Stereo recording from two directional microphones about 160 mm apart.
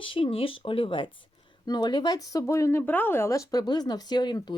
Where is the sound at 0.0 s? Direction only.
35° left (ahead or behind).